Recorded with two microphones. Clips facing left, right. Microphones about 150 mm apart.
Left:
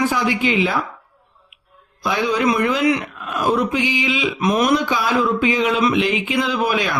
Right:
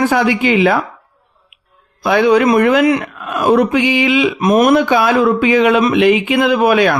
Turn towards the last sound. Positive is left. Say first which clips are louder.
# right 9 dB
turn(degrees=-65)  # may be behind; listen again after turning